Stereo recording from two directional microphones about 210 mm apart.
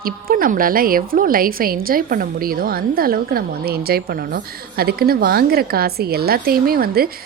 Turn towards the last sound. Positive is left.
turn(degrees=-45)  # may be behind; listen again after turning